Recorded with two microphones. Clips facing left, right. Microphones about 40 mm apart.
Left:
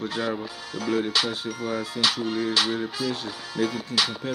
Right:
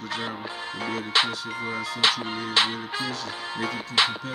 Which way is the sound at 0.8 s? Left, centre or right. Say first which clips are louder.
Left 1 dB; right.